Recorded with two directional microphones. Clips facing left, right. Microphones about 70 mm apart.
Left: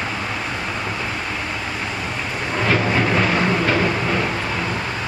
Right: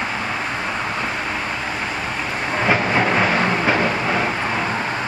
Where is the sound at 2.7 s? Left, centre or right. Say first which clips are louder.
Right 1 dB; centre.